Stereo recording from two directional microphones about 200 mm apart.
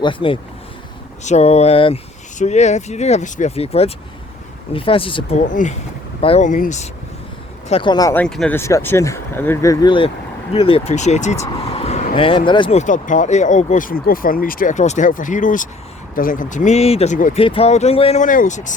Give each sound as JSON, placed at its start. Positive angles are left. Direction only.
{"t": 0.0, "sound": "speech", "side_deg": 25}
{"t": 5.5, "sound": "speech", "side_deg": 40}
{"t": 7.7, "sound": "speech", "side_deg": 25}
{"t": 8.2, "sound": "speech", "side_deg": 5}
{"t": 12.8, "sound": "speech", "side_deg": 40}
{"t": 17.4, "sound": "speech", "side_deg": 30}